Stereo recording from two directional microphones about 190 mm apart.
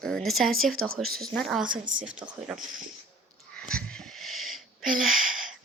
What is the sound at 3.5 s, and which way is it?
Wheeze, 5° left (ahead or behind).